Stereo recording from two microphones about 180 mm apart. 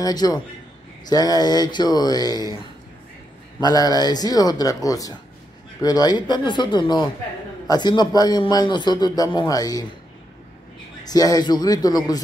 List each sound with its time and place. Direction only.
0.0 s speech: 20° left (ahead or behind)
3.6 s speech: 20° left (ahead or behind)
11.1 s speech: 20° left (ahead or behind)